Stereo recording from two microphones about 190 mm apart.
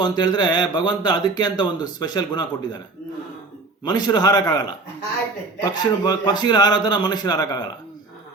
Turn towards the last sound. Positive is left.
turn(degrees=20)  # may be behind; listen again after turning